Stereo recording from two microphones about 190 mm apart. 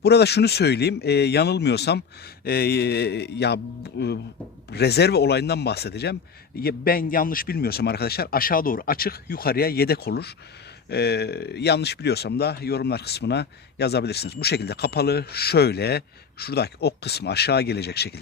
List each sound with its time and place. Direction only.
0.0 s a man's voice: 60° left (ahead or behind)